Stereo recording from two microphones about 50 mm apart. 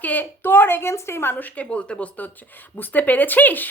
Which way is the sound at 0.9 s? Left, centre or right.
Left.